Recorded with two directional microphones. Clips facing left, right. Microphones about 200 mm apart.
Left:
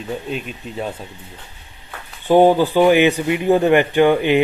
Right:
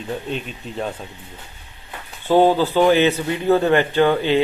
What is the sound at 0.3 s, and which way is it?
Speech, 5° left (ahead or behind).